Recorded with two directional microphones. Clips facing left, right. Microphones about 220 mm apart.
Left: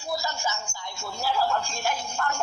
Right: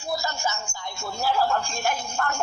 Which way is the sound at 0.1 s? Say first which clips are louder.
Right 2 dB; 50° right (ahead or behind).